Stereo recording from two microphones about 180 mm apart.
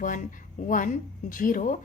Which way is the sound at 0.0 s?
50° left (ahead or behind).